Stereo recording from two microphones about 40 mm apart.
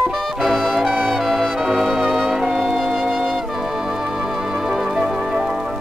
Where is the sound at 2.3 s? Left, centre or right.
Centre.